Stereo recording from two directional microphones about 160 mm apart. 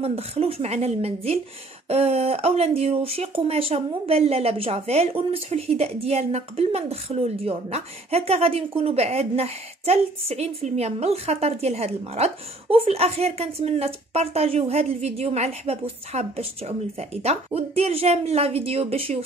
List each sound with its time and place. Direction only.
0.0 s speech: 40° right (ahead or behind)